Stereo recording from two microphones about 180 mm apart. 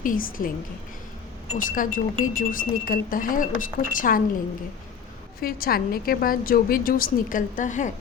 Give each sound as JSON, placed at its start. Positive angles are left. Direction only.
{"t": 0.0, "sound": "speech", "side_deg": 50}
{"t": 1.5, "sound": "speech", "side_deg": 50}
{"t": 5.4, "sound": "speech", "side_deg": 55}